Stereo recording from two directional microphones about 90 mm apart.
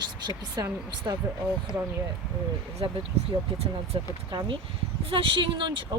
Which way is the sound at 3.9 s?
65° right (ahead or behind).